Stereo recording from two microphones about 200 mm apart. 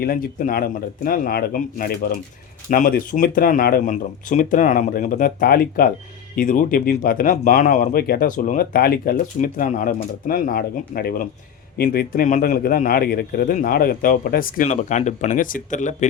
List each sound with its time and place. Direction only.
0.0 s speech: 50° left (ahead or behind)